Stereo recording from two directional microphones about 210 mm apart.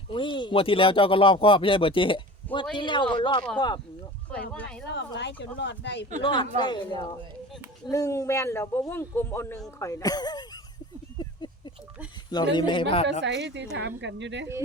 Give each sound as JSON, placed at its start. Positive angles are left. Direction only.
{"t": 0.1, "sound": "speech", "side_deg": 25}
{"t": 4.3, "sound": "a man's voice", "side_deg": 5}
{"t": 4.6, "sound": "speech", "side_deg": 55}
{"t": 6.2, "sound": "a man's voice", "side_deg": 20}
{"t": 11.2, "sound": "a sound", "side_deg": 20}
{"t": 12.5, "sound": "speech", "side_deg": 25}
{"t": 13.2, "sound": "speech", "side_deg": -55}